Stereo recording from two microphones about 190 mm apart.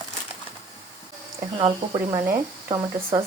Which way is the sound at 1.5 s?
25° right (ahead or behind).